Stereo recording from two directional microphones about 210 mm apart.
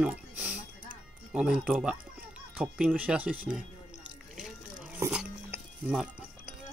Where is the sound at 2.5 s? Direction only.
5° right (ahead or behind).